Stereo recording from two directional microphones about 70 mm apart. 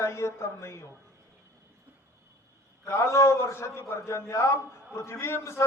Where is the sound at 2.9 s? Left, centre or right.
Left.